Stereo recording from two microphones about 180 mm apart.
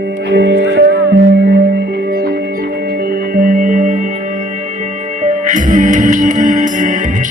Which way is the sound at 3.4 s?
50° right (ahead or behind).